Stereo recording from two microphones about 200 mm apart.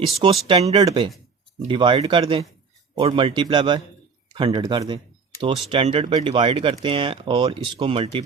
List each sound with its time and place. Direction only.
0.4 s speech: 30° right (ahead or behind)